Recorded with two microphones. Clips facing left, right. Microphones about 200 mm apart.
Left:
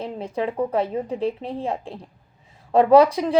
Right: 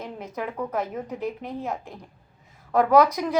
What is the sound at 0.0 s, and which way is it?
A woman's voice, 30° left (ahead or behind).